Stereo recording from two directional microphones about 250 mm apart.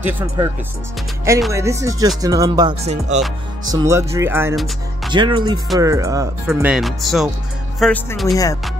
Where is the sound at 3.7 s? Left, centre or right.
Centre.